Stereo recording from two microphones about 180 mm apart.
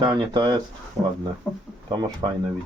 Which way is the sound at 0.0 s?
25° right (ahead or behind).